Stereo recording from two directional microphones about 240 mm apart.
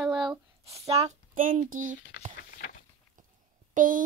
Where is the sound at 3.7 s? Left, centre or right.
Right.